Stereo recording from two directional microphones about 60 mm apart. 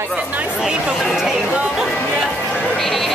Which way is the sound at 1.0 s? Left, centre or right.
Centre.